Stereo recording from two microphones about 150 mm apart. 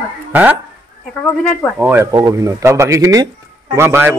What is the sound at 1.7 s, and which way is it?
A man's voice, 15° right (ahead or behind).